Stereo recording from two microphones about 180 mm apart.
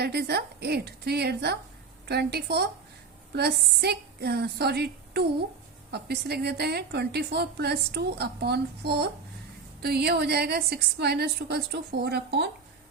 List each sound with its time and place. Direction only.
0.0 s a woman's voice: 65° right (ahead or behind)